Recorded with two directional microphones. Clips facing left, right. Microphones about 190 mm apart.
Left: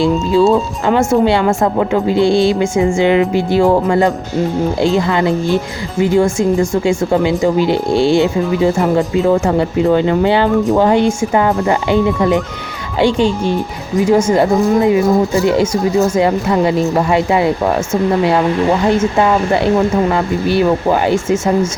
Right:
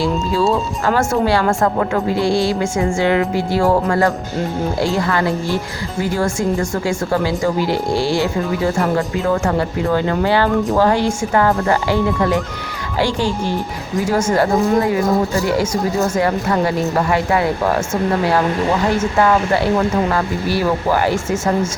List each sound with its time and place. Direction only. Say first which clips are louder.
0.0 s speech: left 6 dB; 25° left (ahead or behind)
18.9 s speech: left 3 dB; 25° left (ahead or behind)